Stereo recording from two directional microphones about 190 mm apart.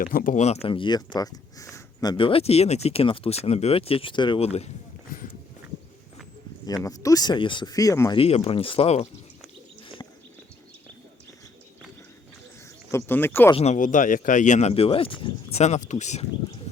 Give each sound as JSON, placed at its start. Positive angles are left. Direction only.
{"t": 0.0, "sound": "speech", "side_deg": 50}
{"t": 6.7, "sound": "speech", "side_deg": 20}
{"t": 8.2, "sound": "speech", "side_deg": 30}
{"t": 12.9, "sound": "speech", "side_deg": 10}
{"t": 13.5, "sound": "speech", "side_deg": 35}